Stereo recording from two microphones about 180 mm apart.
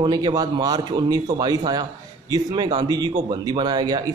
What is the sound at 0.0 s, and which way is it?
A man's voice, 25° right (ahead or behind).